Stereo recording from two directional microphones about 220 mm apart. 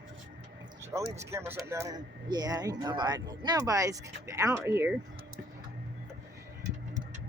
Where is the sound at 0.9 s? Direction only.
15° right (ahead or behind).